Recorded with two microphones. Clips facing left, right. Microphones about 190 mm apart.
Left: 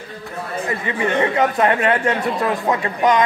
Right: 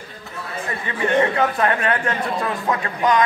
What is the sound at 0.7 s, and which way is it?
Speech, 20° left (ahead or behind).